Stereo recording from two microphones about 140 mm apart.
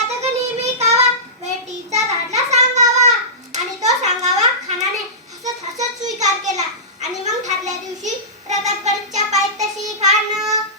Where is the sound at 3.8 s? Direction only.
55° right (ahead or behind).